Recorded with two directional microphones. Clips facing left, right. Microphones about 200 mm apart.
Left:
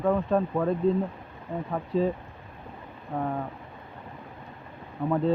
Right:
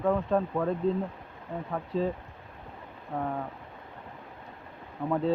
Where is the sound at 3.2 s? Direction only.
5° left (ahead or behind).